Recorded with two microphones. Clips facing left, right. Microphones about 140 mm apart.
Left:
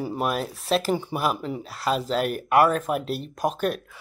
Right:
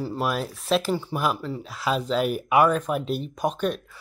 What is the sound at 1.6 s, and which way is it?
Speech, centre (ahead or behind).